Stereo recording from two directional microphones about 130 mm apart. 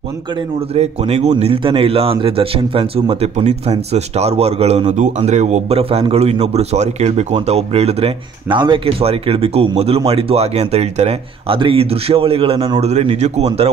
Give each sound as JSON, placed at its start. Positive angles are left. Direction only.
{"t": 0.7, "sound": "speech", "side_deg": -55}
{"t": 1.4, "sound": "speech", "side_deg": -45}